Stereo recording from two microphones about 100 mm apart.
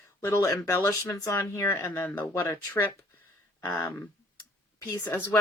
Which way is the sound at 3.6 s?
35° left (ahead or behind).